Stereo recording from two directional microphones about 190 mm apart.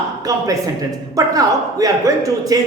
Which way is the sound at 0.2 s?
20° right (ahead or behind).